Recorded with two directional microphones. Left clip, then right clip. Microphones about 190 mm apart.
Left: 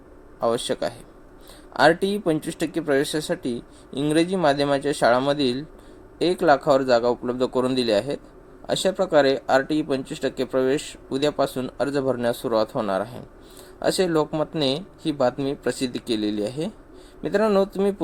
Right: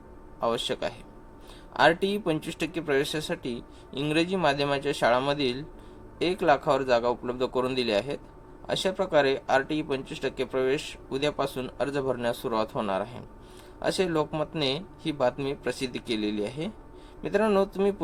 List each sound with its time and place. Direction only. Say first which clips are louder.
0.3 s speech: left 5 dB; 45° left (ahead or behind)